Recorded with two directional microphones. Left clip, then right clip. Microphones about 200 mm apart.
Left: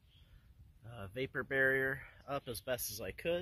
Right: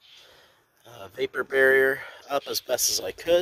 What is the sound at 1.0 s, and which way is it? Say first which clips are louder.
Speech: right 11 dB; 15° right (ahead or behind).